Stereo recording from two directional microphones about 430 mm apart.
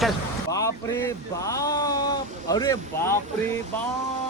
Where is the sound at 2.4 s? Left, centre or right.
Centre.